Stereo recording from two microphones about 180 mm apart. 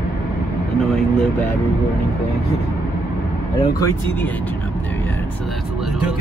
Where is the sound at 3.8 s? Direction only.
15° left (ahead or behind).